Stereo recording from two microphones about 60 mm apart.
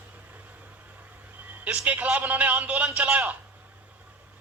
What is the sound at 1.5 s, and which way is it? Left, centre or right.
A man's voice, right.